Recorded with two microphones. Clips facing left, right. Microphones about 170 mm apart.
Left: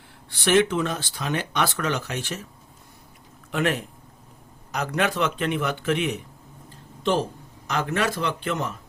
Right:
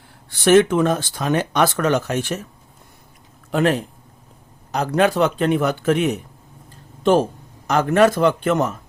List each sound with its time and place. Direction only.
0.3 s speech: 45° right (ahead or behind)
3.5 s speech: 35° right (ahead or behind)